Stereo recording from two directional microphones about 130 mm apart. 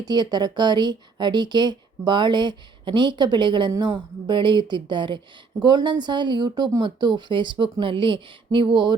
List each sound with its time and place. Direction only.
0.0 s speech: 35° right (ahead or behind)